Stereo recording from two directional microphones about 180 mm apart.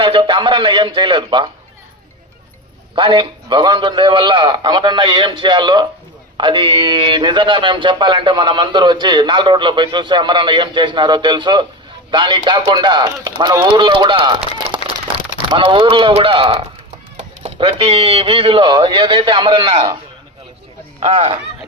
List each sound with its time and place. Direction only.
0.0 s speech: 30° right (ahead or behind)
2.9 s speech: 25° right (ahead or behind)
21.0 s speech: 40° right (ahead or behind)